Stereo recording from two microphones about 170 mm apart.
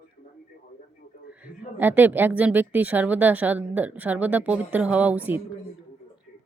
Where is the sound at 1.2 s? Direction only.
10° right (ahead or behind).